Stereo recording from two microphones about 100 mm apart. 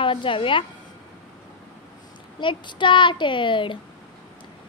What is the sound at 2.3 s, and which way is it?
A woman's voice, 50° left (ahead or behind).